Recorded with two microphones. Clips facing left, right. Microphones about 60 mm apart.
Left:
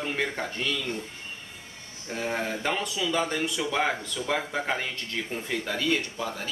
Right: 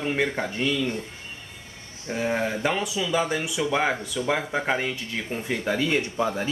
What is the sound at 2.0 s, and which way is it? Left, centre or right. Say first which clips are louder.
Speech: right 4 dB; centre.